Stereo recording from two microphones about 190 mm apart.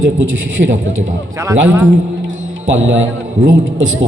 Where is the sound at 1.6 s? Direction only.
10° right (ahead or behind).